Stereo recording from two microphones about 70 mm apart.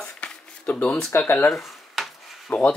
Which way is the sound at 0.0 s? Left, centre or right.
Left.